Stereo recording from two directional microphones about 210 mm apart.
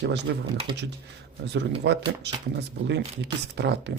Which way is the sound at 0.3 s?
55° right (ahead or behind).